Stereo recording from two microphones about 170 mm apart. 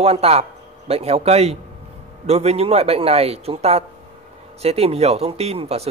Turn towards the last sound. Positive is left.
turn(degrees=-35)  # may be behind; listen again after turning